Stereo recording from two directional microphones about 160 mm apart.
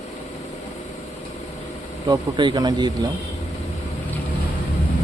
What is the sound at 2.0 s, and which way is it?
Speech, 25° right (ahead or behind).